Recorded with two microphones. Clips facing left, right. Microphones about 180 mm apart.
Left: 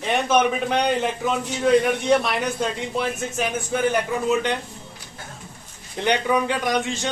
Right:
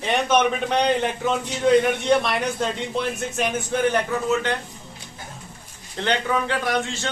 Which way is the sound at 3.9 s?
20° left (ahead or behind).